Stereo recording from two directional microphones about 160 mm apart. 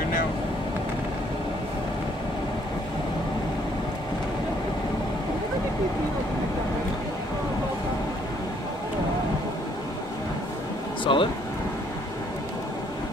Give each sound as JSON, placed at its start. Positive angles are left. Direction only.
{"t": 11.1, "sound": "speech", "side_deg": 30}